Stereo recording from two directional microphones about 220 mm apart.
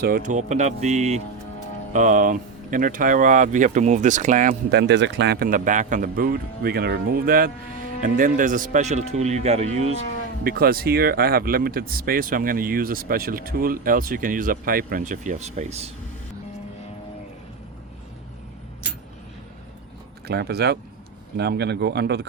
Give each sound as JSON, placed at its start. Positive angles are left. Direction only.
{"t": 0.0, "sound": "speech", "side_deg": -40}
{"t": 4.7, "sound": "speech", "side_deg": -50}
{"t": 10.4, "sound": "speech", "side_deg": -45}
{"t": 20.2, "sound": "speech", "side_deg": -45}